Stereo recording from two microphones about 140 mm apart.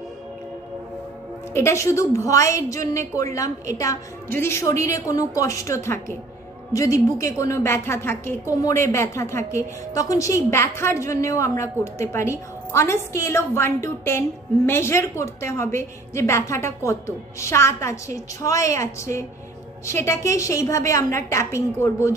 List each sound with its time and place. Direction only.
1.5 s a woman's voice: 20° left (ahead or behind)